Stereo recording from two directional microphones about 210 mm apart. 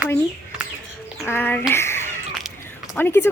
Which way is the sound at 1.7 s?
10° left (ahead or behind).